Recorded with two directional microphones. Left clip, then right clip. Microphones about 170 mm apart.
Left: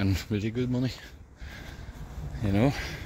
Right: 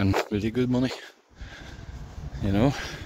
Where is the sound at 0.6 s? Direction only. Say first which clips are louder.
Right 7 dB; 45° right (ahead or behind).